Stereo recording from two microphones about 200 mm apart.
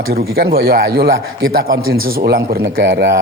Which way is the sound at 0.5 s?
50° right (ahead or behind).